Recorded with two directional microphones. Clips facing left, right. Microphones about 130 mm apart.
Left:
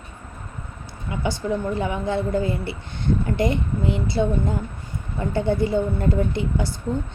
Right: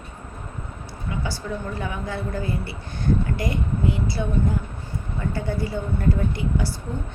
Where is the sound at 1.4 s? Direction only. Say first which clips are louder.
Left 6 dB; 20° left (ahead or behind).